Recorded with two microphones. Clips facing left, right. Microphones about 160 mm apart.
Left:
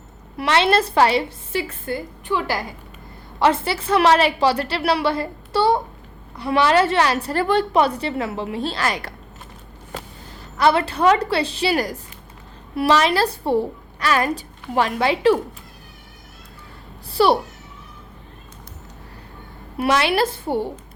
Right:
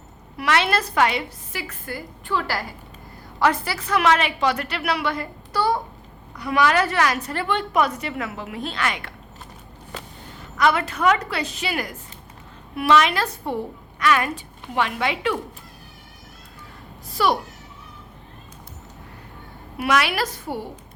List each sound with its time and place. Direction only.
0.3 s a woman's voice: 30° left (ahead or behind)
10.6 s a woman's voice: 30° left (ahead or behind)
17.1 s a child's voice: 30° left (ahead or behind)
19.8 s a woman's voice: 30° left (ahead or behind)